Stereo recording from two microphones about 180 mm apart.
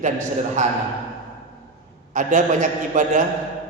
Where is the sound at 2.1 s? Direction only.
45° right (ahead or behind).